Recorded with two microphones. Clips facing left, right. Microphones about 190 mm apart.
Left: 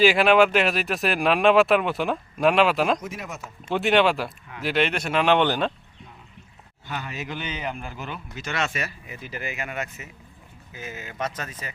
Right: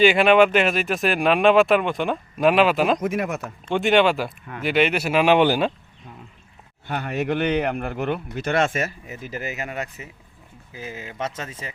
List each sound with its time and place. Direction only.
0.0 s speech: centre (ahead or behind)
3.0 s speech: 60° right (ahead or behind)
3.7 s speech: centre (ahead or behind)
6.8 s speech: 55° right (ahead or behind); by 11.7 s 25° right (ahead or behind)